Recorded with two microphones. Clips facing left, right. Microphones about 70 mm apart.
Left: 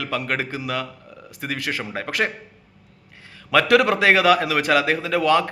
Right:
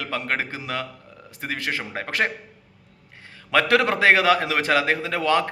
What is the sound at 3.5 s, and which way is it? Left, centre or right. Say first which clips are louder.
A man's voice: left 3 dB; right.